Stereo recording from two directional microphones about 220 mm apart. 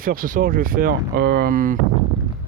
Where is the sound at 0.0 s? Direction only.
40° right (ahead or behind).